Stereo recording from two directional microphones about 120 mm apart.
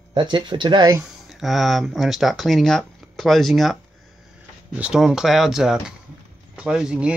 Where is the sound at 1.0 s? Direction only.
Centre (ahead or behind).